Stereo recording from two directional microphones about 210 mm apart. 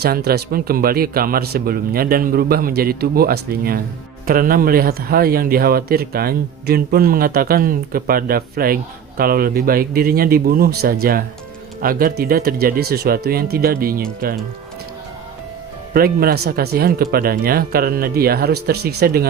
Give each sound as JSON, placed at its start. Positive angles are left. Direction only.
{"t": 0.0, "sound": "a man's voice", "side_deg": -50}
{"t": 15.9, "sound": "a man's voice", "side_deg": -45}